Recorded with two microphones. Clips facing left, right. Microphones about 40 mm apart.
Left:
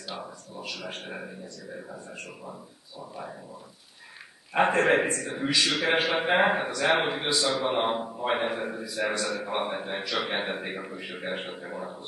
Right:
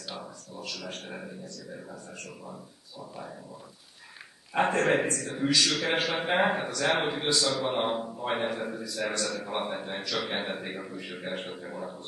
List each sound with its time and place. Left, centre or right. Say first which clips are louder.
0.1 s a man's voice: left 3 dB; centre
4.6 s a man's voice: left 3 dB; centre